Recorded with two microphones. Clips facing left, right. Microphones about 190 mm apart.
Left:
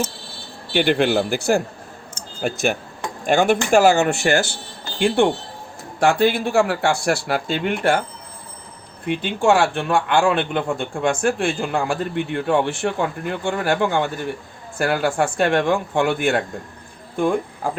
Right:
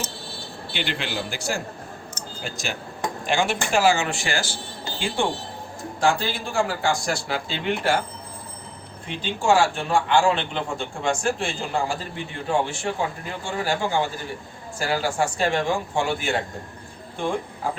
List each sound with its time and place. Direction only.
0.7 s a man's voice: 55° left (ahead or behind)
9.0 s a man's voice: 60° left (ahead or behind)